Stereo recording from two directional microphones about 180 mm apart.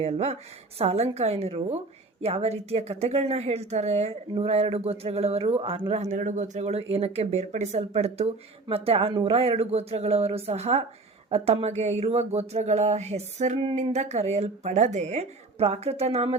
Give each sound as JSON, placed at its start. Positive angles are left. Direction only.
{"t": 0.0, "sound": "speech", "side_deg": -35}
{"t": 5.9, "sound": "speech", "side_deg": -40}